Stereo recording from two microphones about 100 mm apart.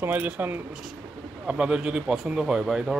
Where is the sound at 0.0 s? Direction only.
20° right (ahead or behind).